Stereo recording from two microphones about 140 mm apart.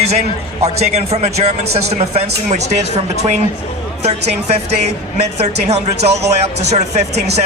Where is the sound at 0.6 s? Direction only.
50° right (ahead or behind).